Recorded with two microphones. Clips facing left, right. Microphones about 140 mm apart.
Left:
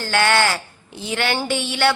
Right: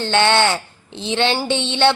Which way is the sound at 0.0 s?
25° right (ahead or behind).